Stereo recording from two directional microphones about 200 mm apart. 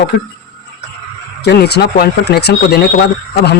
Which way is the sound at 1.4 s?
55° left (ahead or behind).